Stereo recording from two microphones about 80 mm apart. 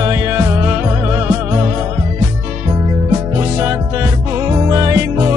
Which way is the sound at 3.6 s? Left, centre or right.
Right.